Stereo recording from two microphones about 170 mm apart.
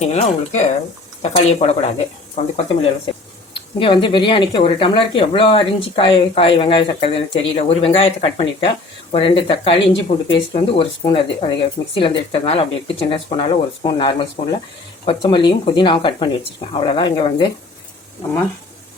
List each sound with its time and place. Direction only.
0.0 s speech: 40° left (ahead or behind)